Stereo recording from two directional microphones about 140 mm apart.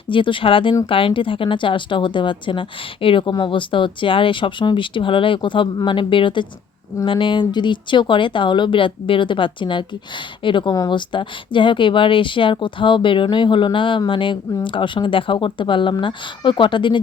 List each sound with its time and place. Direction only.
0.1 s a woman's voice: 35° left (ahead or behind)